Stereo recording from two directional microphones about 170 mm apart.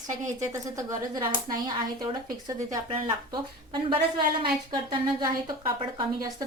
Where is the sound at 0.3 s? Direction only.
20° right (ahead or behind).